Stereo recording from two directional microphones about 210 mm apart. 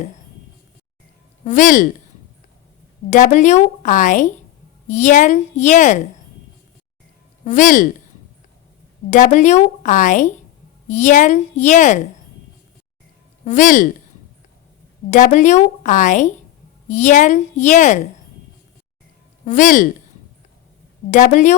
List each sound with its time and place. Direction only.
1.5 s a woman's voice: 40° left (ahead or behind)
3.1 s a woman's voice: 35° left (ahead or behind)
7.4 s a woman's voice: 35° left (ahead or behind)
9.0 s a woman's voice: 35° left (ahead or behind)
13.4 s speech: 35° left (ahead or behind)
15.1 s a woman's voice: 35° left (ahead or behind)
19.5 s a woman's voice: 35° left (ahead or behind)
21.1 s a woman's voice: 35° left (ahead or behind)